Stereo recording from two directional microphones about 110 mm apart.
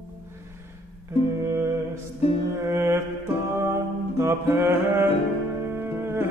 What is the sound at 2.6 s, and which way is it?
Mantra, 25° right (ahead or behind).